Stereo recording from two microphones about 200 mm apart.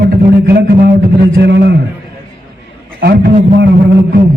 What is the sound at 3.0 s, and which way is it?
Speech, 55° right (ahead or behind).